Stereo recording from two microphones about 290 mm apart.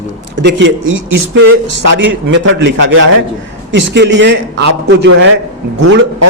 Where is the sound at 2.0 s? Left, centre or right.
Right.